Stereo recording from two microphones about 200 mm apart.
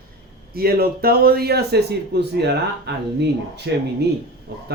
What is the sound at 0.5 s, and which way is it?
Speech, 50° right (ahead or behind).